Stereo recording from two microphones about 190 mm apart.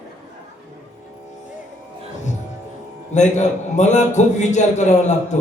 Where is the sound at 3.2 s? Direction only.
40° left (ahead or behind).